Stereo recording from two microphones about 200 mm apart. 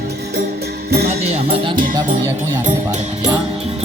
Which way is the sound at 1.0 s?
30° right (ahead or behind).